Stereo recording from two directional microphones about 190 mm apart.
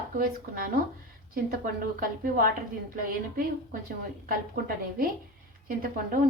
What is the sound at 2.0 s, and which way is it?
A woman's voice, 50° right (ahead or behind).